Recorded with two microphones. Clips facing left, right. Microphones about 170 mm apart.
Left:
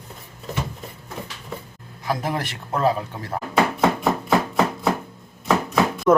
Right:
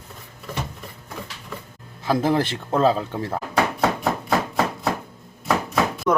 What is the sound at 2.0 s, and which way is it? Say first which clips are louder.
Speech: right 5 dB; 25° right (ahead or behind).